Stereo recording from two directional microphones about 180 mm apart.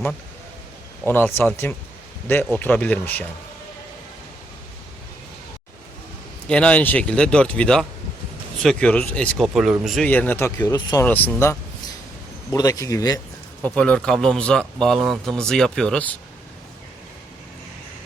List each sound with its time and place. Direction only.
1.0 s speech: 10° left (ahead or behind)
6.5 s a man's voice: 5° left (ahead or behind)
12.5 s speech: 20° left (ahead or behind)
13.6 s a man's voice: 10° left (ahead or behind)